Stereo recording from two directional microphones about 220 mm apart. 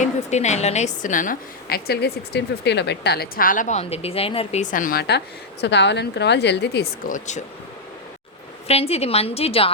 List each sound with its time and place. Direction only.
0.0 s a woman's voice: 30° left (ahead or behind); by 6.8 s 50° left (ahead or behind)
7.1 s a woman's voice: 30° left (ahead or behind)
8.6 s a woman's voice: 25° left (ahead or behind)